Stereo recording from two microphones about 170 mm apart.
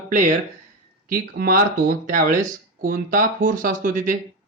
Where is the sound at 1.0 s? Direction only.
55° right (ahead or behind).